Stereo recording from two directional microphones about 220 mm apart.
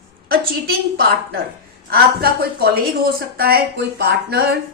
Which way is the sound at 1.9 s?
45° right (ahead or behind).